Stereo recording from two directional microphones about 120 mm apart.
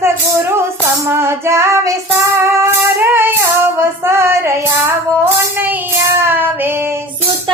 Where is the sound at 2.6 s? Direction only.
20° right (ahead or behind).